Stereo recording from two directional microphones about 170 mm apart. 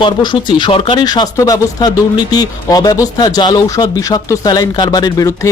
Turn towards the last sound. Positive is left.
turn(degrees=20)  # may be behind; listen again after turning